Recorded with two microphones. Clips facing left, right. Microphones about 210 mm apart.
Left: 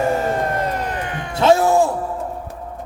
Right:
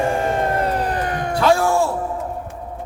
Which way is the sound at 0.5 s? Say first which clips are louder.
Right 2 dB; 30° right (ahead or behind).